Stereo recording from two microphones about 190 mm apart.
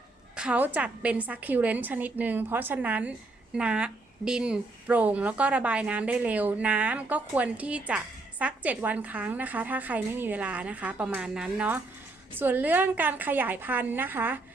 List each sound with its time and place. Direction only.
0.3 s a woman's voice: 5° right (ahead or behind)